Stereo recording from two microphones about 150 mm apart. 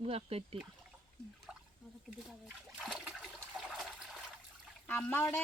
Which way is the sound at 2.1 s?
5° right (ahead or behind).